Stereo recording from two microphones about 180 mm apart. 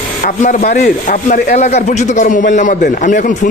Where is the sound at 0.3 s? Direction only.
45° left (ahead or behind).